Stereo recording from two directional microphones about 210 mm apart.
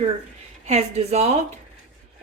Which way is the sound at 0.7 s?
30° right (ahead or behind).